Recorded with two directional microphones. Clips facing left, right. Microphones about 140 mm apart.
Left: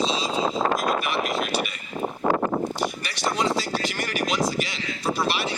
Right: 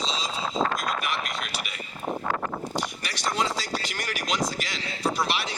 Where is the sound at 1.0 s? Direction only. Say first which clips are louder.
Left 6 dB; centre (ahead or behind).